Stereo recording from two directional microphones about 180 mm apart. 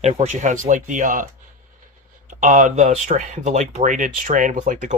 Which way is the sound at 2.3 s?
45° right (ahead or behind).